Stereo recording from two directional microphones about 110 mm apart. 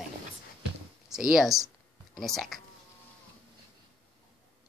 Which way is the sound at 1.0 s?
5° right (ahead or behind).